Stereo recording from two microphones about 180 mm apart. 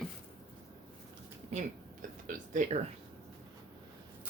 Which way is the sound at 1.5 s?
45° right (ahead or behind).